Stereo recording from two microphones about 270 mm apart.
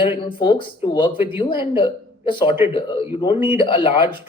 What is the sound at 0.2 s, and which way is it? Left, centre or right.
A man's voice, centre.